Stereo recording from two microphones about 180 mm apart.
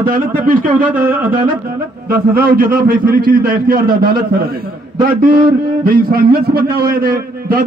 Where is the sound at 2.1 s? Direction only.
55° right (ahead or behind).